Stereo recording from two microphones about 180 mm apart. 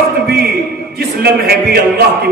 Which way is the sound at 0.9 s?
60° right (ahead or behind).